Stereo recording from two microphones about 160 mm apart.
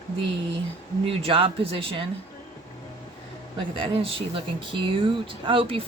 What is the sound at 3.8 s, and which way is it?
Speech, 35° right (ahead or behind).